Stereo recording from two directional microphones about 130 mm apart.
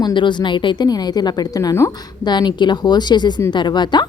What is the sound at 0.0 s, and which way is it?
A woman's voice, 35° left (ahead or behind).